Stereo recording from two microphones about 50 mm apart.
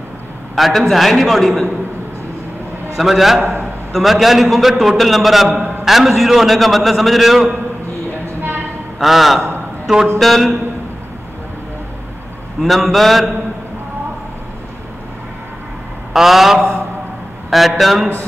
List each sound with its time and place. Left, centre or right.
0.6 s a man's voice: centre
3.0 s a man's voice: centre
8.4 s a sound: right
9.0 s a man's voice: centre
12.6 s a man's voice: centre
16.1 s a man's voice: centre